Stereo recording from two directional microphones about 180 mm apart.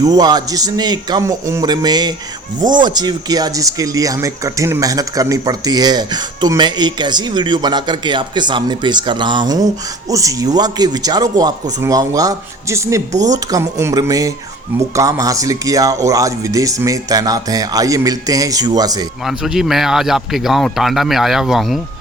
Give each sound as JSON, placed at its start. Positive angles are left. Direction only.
{"t": 0.0, "sound": "speech", "side_deg": -20}
{"t": 19.2, "sound": "speech", "side_deg": 0}